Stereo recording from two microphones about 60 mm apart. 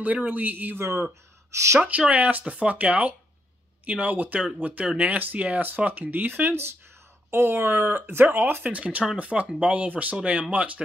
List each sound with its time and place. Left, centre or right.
0.0 s speech: right
0.7 s speech: right
1.5 s speech: right
1.8 s speech: right
8.7 s speech: right